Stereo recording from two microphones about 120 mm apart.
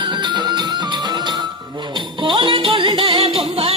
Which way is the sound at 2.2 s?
45° right (ahead or behind).